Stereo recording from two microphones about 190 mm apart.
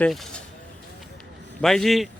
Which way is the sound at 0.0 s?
5° left (ahead or behind).